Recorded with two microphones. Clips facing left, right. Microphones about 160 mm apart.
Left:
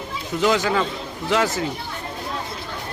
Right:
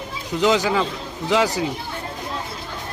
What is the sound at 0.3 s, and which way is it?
Speech, 20° right (ahead or behind).